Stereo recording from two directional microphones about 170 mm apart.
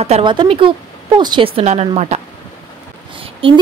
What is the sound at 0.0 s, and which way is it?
Speech, 30° right (ahead or behind).